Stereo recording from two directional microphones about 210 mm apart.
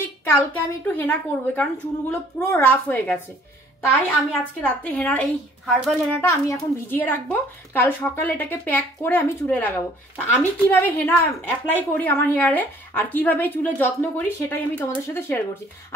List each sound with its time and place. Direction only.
0.2 s a woman's voice: 10° left (ahead or behind)
4.3 s a woman's voice: 5° left (ahead or behind)
6.2 s a woman's voice: 15° left (ahead or behind)